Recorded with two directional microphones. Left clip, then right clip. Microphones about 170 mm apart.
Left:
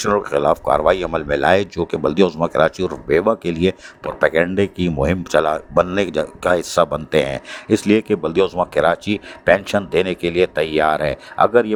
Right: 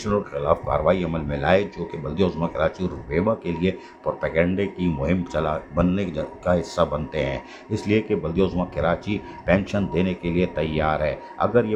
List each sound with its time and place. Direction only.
0.0 s speech: 50° left (ahead or behind)